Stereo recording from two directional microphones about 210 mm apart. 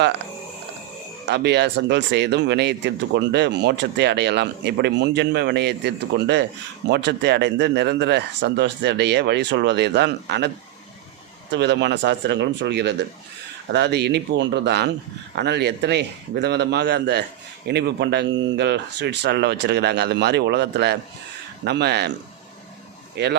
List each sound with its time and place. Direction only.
1.3 s speech: 55° right (ahead or behind)
11.5 s speech: 55° right (ahead or behind)
23.2 s speech: 55° right (ahead or behind)